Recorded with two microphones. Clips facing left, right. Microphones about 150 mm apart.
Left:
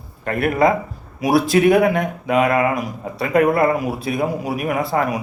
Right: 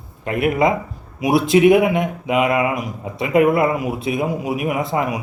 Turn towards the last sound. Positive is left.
turn(degrees=-20)  # may be behind; listen again after turning